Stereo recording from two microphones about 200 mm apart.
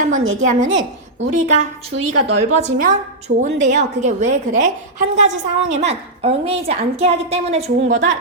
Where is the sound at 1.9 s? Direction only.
60° right (ahead or behind).